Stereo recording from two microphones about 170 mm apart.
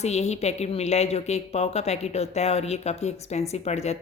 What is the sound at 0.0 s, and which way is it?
A woman's voice, 40° left (ahead or behind).